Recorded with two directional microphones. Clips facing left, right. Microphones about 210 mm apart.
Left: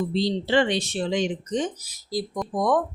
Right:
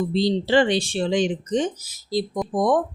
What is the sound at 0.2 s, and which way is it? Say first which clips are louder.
Speech: right 3 dB; 35° right (ahead or behind).